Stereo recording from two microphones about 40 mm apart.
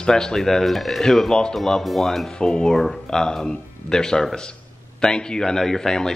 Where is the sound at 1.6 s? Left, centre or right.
Centre.